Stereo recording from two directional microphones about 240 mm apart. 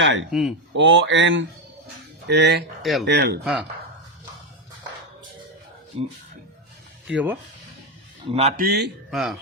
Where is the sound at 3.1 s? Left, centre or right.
Right.